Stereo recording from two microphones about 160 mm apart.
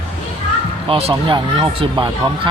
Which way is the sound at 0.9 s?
35° right (ahead or behind).